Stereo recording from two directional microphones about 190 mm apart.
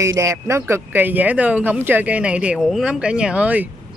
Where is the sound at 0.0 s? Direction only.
15° right (ahead or behind).